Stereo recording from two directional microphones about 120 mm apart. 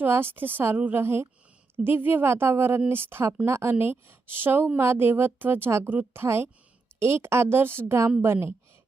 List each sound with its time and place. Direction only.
0.0 s a woman's voice: 20° right (ahead or behind)